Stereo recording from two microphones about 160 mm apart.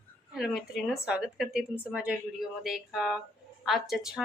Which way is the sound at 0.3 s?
Centre (ahead or behind).